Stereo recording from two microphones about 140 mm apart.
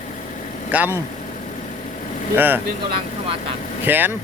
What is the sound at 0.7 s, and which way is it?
Speech, 10° right (ahead or behind).